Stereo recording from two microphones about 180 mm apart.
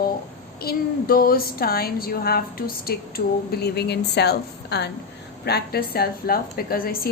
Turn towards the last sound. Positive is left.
turn(degrees=55)  # may be behind; listen again after turning